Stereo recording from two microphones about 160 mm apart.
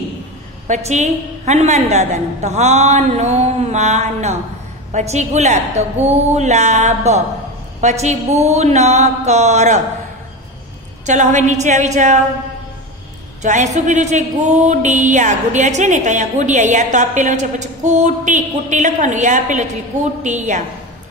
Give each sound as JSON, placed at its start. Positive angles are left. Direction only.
{"t": 0.7, "sound": "speech", "side_deg": -45}
{"t": 11.1, "sound": "speech", "side_deg": -50}
{"t": 13.4, "sound": "a woman's voice", "side_deg": -50}